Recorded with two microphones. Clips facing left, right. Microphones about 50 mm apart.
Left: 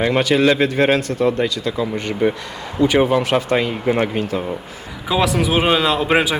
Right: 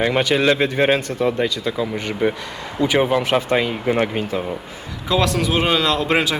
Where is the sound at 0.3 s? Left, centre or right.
Centre.